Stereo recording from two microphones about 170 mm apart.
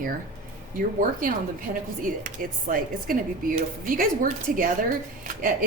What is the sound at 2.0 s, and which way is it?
Speech, 55° right (ahead or behind).